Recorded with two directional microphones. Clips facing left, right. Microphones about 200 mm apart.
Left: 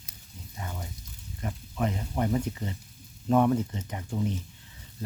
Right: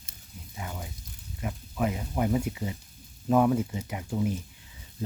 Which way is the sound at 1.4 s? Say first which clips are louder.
Right 1 dB; 5° right (ahead or behind).